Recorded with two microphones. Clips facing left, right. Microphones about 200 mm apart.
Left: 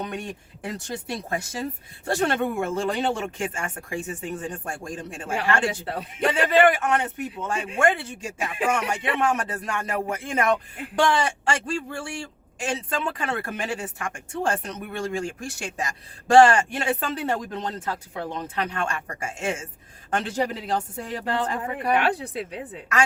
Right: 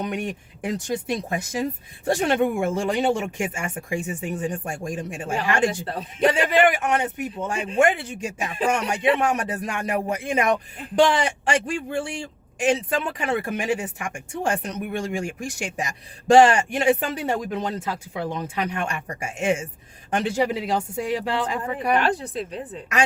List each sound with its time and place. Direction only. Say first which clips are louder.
0.0 s speech: right 4 dB; 15° right (ahead or behind)
21.2 s speech: right 1 dB; 90° right
21.9 s speech: even; 10° left (ahead or behind)